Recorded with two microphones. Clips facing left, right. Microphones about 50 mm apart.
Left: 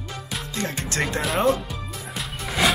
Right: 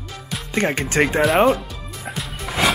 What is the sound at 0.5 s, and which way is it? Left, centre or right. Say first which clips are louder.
Speech: right 9 dB; right.